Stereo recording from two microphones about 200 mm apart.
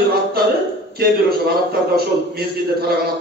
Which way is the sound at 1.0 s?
50° right (ahead or behind).